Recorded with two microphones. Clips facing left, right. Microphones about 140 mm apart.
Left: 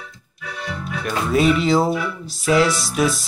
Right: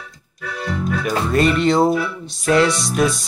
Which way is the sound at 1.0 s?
Centre (ahead or behind).